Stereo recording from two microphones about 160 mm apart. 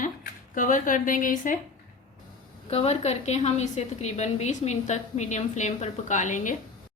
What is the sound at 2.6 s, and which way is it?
A woman's voice, 40° left (ahead or behind).